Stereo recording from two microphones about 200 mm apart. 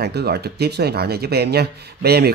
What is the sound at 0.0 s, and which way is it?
Speech, 55° right (ahead or behind).